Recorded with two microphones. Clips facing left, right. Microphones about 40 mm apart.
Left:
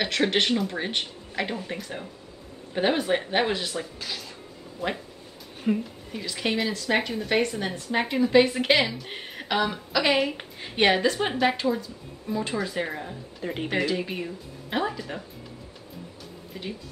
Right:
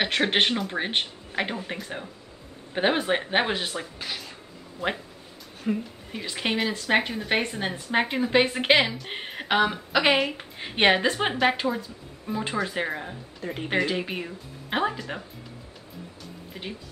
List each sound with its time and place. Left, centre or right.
0.0 s a woman's voice: right
5.7 s a woman's voice: centre
6.1 s a woman's voice: right
13.4 s speech: centre
13.8 s speech: right
16.5 s a woman's voice: centre